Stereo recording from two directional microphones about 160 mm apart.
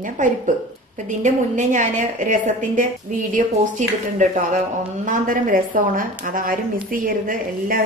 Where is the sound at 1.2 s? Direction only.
50° right (ahead or behind).